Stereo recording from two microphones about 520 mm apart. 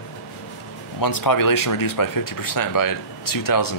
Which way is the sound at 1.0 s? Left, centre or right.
Left.